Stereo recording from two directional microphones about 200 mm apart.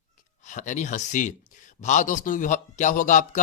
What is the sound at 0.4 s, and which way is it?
A man's voice, 40° left (ahead or behind).